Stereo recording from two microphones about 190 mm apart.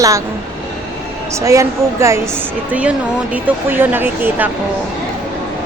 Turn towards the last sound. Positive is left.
turn(degrees=-10)  # may be behind; listen again after turning